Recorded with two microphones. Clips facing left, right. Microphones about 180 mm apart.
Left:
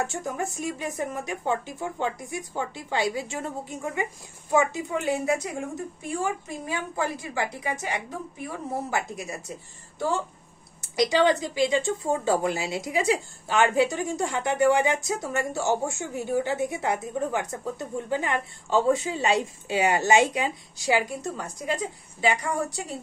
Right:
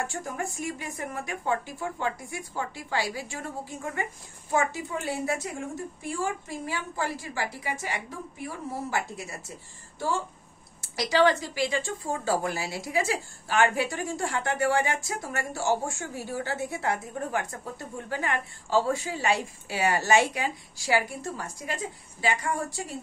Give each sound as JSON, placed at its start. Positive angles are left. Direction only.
{"t": 0.0, "sound": "speech", "side_deg": 20}
{"t": 8.9, "sound": "a woman's voice", "side_deg": 20}
{"t": 10.8, "sound": "speech", "side_deg": 20}